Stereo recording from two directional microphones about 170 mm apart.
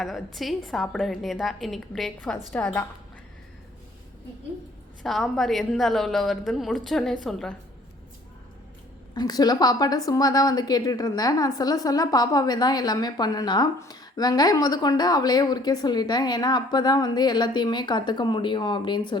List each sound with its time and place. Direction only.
0.0 s a woman's voice: centre (ahead or behind)
5.0 s a woman's voice: centre (ahead or behind)
9.1 s a woman's voice: 25° left (ahead or behind)